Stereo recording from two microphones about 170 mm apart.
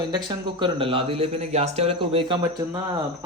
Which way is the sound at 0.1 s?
25° right (ahead or behind).